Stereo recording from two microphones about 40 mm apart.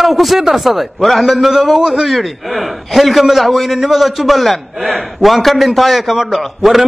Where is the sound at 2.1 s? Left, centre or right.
Centre.